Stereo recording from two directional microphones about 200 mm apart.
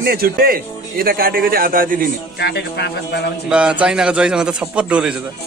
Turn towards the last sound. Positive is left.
turn(degrees=-5)  # may be behind; listen again after turning